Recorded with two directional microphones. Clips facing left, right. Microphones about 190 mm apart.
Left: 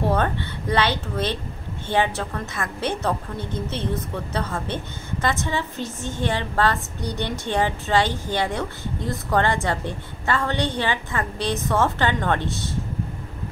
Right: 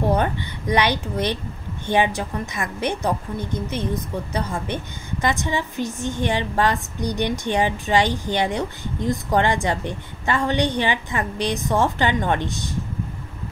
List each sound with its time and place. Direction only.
0.1 s a woman's voice: 15° right (ahead or behind)